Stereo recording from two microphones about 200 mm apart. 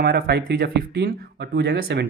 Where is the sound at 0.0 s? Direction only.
50° right (ahead or behind).